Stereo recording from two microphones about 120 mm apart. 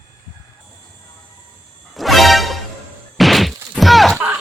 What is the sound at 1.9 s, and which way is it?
Music, centre (ahead or behind).